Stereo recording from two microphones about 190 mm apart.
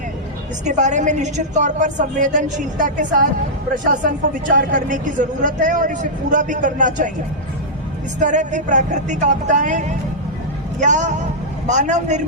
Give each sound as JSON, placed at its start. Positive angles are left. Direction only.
{"t": 0.6, "sound": "speech", "side_deg": -40}
{"t": 8.2, "sound": "speech", "side_deg": -40}